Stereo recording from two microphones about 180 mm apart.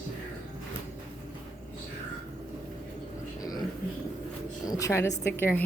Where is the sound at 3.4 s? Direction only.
20° left (ahead or behind).